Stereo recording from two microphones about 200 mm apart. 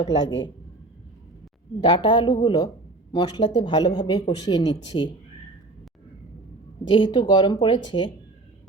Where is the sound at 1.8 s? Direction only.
25° left (ahead or behind).